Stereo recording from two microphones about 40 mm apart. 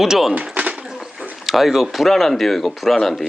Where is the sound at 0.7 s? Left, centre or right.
Centre.